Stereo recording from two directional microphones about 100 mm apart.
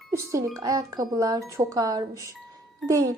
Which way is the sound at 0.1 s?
30° right (ahead or behind).